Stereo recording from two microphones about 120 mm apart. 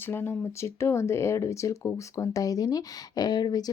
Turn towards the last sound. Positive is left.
turn(degrees=35)  # may be behind; listen again after turning